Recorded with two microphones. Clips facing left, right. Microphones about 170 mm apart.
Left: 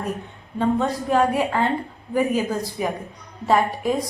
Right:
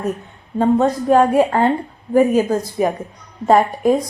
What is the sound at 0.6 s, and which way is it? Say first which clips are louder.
A woman's voice: right 6 dB; 45° right (ahead or behind).